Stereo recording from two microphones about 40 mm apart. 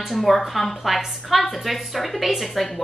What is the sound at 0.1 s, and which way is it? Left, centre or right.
A woman's voice, centre.